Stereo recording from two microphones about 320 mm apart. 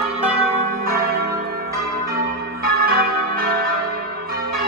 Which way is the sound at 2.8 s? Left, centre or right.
Right.